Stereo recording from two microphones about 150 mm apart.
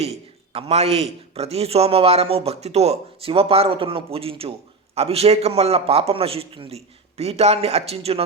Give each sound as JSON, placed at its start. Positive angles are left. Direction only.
{"t": 0.5, "sound": "a man's voice", "side_deg": -45}